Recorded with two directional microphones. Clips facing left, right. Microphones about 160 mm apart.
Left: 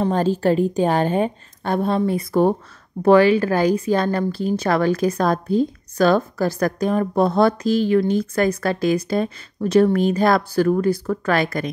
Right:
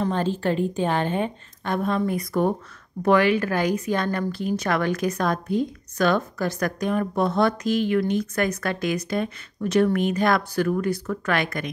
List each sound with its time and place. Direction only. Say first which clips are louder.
0.0 s speech: left 5 dB; 40° left (ahead or behind)